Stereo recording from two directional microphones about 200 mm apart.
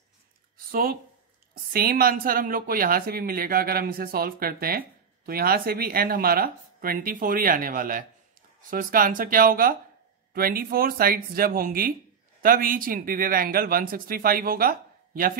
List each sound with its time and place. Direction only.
0.7 s speech: 45° right (ahead or behind)